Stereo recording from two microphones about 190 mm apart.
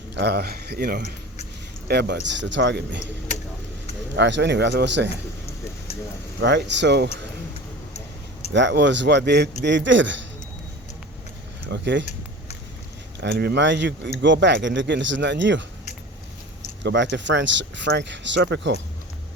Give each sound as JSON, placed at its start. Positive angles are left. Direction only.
{"t": 0.1, "sound": "speech", "side_deg": -60}
{"t": 4.1, "sound": "speech", "side_deg": -65}
{"t": 6.4, "sound": "speech", "side_deg": -65}
{"t": 8.5, "sound": "speech", "side_deg": -70}
{"t": 11.7, "sound": "speech", "side_deg": -70}
{"t": 13.1, "sound": "speech", "side_deg": -60}
{"t": 16.8, "sound": "speech", "side_deg": -70}